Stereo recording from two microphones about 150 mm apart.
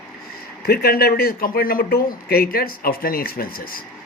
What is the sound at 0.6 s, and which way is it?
Speech, 90° left.